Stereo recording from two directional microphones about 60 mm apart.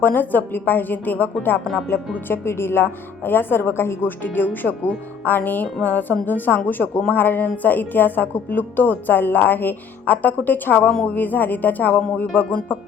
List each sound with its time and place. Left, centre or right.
0.0 s speech: left